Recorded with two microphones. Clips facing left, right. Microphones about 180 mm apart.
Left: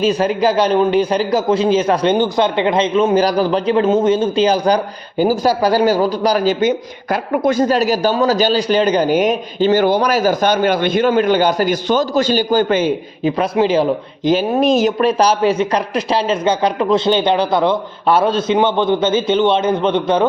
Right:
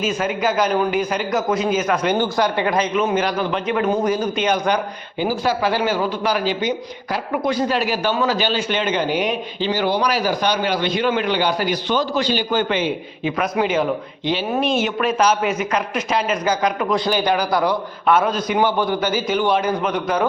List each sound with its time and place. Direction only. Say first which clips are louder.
0.0 s a man's voice: left 6 dB; 35° left (ahead or behind)
2.1 s a man's voice: left 4 dB; 20° left (ahead or behind); by 13.3 s 45° left (ahead or behind)
13.4 s a man's voice: left 5 dB; 30° left (ahead or behind)
14.3 s a man's voice: left 7 dB; 40° left (ahead or behind)